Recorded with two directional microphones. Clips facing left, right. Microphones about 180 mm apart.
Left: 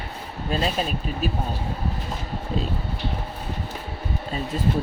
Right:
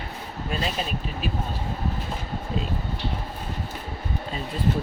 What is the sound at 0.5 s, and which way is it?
Speech, 35° left (ahead or behind).